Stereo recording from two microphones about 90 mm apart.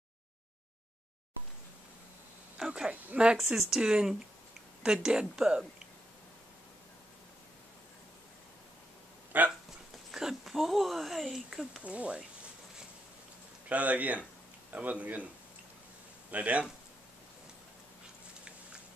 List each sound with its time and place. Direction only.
2.5 s speech: 10° right (ahead or behind)
9.3 s a sound: 20° right (ahead or behind)
10.1 s speech: 5° right (ahead or behind)
11.8 s speech: 15° right (ahead or behind)
13.7 s speech: 15° right (ahead or behind)
16.3 s speech: 15° right (ahead or behind)